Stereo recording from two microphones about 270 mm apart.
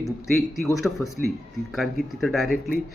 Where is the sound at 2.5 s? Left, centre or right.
Left.